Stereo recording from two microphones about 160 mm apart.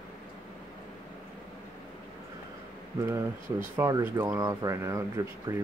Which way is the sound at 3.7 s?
15° right (ahead or behind).